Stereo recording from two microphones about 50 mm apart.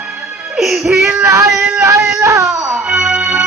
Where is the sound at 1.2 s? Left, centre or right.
Right.